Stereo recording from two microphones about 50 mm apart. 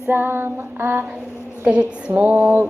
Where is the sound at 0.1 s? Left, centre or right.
Right.